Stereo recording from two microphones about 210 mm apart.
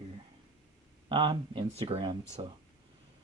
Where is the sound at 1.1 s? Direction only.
25° right (ahead or behind).